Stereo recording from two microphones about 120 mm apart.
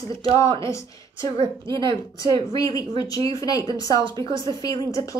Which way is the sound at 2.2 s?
30° left (ahead or behind).